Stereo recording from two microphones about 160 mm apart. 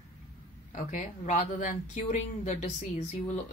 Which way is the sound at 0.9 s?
50° left (ahead or behind).